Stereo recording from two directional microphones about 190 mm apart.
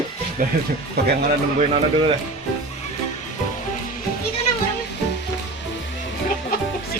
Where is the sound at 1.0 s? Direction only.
60° right (ahead or behind).